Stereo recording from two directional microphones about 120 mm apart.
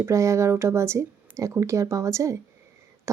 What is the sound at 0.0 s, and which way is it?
A woman's voice, 25° right (ahead or behind).